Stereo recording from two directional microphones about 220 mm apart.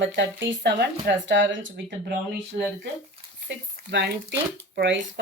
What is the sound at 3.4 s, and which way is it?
Speech, 50° right (ahead or behind).